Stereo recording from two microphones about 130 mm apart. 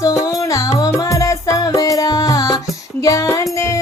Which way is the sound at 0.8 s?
25° left (ahead or behind).